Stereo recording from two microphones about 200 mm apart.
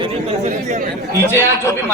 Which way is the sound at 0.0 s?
30° right (ahead or behind).